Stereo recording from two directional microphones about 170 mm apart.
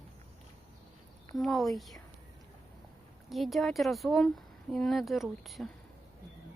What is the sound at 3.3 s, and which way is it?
Speech, centre (ahead or behind).